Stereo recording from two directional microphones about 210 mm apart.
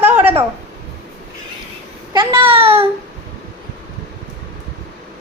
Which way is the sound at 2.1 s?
25° right (ahead or behind).